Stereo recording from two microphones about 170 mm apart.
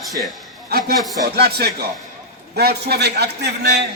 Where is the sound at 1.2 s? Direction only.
70° right (ahead or behind).